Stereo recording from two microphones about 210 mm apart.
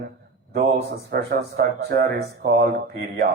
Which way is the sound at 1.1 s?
45° right (ahead or behind).